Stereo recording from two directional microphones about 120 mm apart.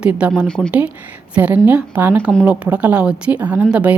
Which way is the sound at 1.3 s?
15° right (ahead or behind).